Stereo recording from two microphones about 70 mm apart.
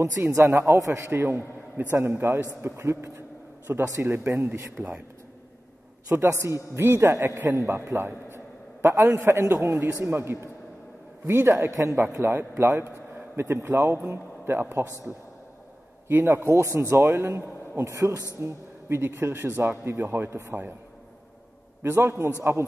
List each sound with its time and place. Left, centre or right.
0.0 s a man's voice: right
2.6 s a sound: right
4.0 s speech: right
4.8 s speech: right
6.0 s speech: right
9.1 s a man's voice: right
16.1 s speech: right
17.9 s a man's voice: right
18.4 s speech: right
21.8 s speech: right